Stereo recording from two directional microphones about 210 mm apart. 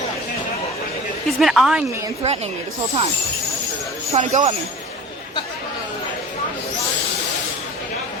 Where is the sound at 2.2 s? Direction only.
30° right (ahead or behind).